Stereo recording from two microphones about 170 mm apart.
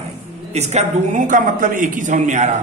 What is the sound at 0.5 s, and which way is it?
A man's voice, 40° right (ahead or behind).